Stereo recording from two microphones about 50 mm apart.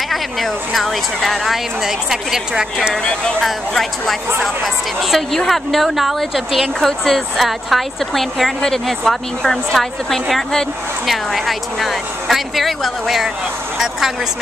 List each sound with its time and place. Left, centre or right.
0.1 s speech: centre
3.0 s speech: centre
3.7 s speech: centre
11.1 s speech: centre